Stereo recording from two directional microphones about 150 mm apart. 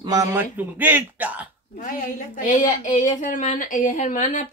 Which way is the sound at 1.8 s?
60° left (ahead or behind).